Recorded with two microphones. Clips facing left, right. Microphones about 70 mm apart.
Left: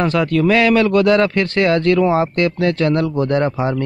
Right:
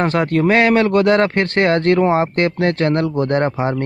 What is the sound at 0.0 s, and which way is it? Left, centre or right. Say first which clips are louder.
Speech: even; right.